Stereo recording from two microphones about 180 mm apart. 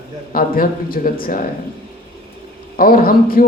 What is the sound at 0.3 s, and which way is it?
A woman's voice, 55° left (ahead or behind).